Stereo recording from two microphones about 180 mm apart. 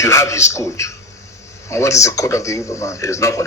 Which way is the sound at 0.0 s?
15° left (ahead or behind).